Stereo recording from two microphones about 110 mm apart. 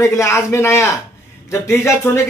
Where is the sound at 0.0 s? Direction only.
25° left (ahead or behind).